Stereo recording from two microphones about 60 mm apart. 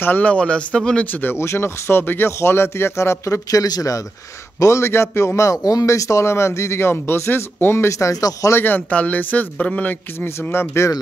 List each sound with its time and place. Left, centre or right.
0.2 s speech: left
1.1 s speech: left
1.4 s a man's voice: left
3.4 s speech: left
4.6 s a man's voice: left
8.5 s speech: left
10.2 s a man's voice: left